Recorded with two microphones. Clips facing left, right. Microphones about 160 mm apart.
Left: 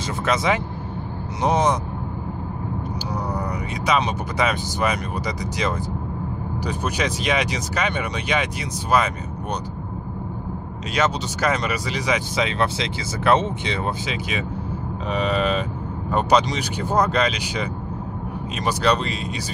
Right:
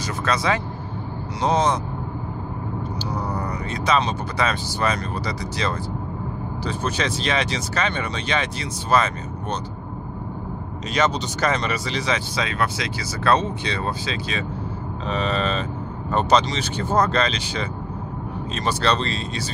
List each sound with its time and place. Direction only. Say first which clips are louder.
0.2 s speech: left 1 dB; 20° left (ahead or behind)
3.3 s speech: even; 15° left (ahead or behind)
11.0 s speech: right 1 dB; 10° left (ahead or behind)